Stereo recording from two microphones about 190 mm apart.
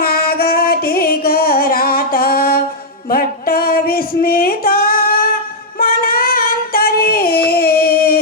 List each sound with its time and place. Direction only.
0.0 s music: 50° left (ahead or behind)
3.1 s a sound: 50° left (ahead or behind)
5.8 s child singing: 50° left (ahead or behind)